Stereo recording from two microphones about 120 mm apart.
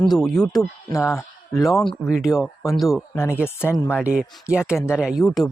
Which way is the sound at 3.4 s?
20° left (ahead or behind).